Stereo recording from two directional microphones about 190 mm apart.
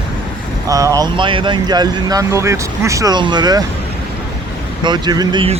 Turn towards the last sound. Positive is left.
turn(degrees=-25)  # may be behind; listen again after turning